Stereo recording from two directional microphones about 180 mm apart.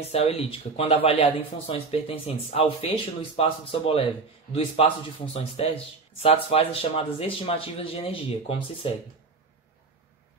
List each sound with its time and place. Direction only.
0.0 s speech: 35° left (ahead or behind)